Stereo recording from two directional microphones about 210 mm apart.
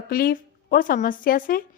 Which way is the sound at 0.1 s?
45° left (ahead or behind).